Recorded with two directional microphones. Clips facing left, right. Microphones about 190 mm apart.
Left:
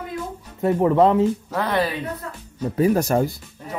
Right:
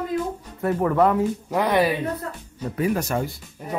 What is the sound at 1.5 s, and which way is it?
Speech, 15° right (ahead or behind).